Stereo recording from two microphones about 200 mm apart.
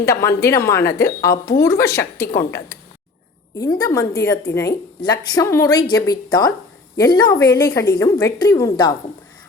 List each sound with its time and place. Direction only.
0.0 s speech: 15° left (ahead or behind)